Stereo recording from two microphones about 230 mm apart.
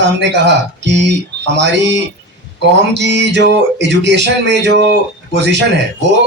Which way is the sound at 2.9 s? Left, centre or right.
Right.